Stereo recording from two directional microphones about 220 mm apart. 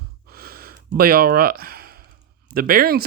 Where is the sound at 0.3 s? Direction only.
45° right (ahead or behind).